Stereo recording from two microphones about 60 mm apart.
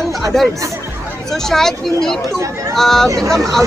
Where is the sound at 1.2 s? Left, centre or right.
Centre.